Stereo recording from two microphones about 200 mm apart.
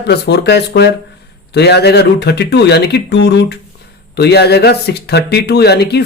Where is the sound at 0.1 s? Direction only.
55° left (ahead or behind).